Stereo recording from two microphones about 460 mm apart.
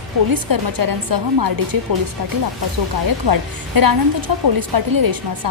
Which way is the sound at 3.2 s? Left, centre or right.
Right.